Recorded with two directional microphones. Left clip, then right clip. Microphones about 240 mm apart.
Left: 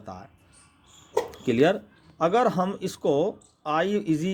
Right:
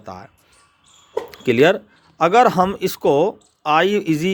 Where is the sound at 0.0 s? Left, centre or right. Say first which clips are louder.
Right 6 dB; right.